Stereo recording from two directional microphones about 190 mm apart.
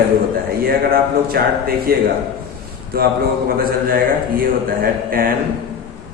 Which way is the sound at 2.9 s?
50° right (ahead or behind).